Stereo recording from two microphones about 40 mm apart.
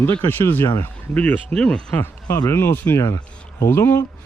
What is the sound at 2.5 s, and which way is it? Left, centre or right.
Speech, left.